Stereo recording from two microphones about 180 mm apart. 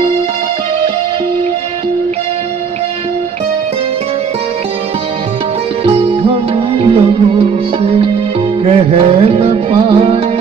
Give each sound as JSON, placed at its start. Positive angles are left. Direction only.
{"t": 5.9, "sound": "music", "side_deg": -30}